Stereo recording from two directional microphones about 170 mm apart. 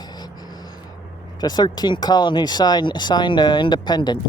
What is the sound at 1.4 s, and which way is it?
Speech, 25° left (ahead or behind).